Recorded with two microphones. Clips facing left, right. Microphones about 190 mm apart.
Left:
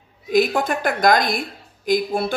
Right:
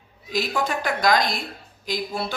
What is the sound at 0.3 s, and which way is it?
Speech, 50° left (ahead or behind).